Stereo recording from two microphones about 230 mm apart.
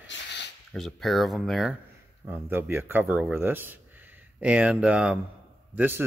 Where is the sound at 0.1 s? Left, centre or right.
Left.